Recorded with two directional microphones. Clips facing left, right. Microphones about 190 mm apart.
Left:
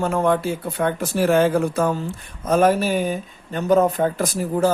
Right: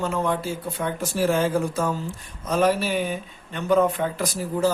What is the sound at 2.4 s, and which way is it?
Speech, 50° left (ahead or behind).